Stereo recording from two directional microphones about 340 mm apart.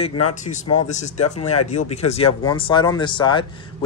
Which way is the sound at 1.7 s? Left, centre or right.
Centre.